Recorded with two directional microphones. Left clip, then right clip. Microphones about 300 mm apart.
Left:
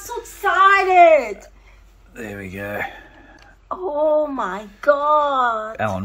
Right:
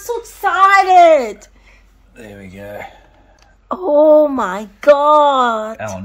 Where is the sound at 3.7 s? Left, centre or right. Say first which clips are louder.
Right 9 dB; right.